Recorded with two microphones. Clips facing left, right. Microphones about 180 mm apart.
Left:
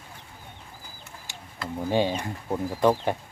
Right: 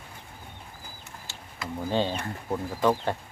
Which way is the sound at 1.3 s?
15° left (ahead or behind).